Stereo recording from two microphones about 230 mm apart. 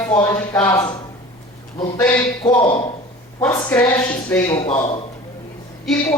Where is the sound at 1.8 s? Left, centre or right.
Centre.